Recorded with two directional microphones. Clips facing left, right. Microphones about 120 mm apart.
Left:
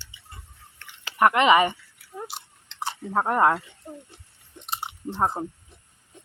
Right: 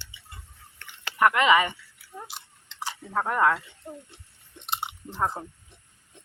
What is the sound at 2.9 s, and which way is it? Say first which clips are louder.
Speech: left 4 dB; 30° left (ahead or behind).